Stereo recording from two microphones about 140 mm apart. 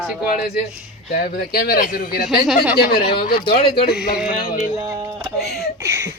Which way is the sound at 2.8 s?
90° left.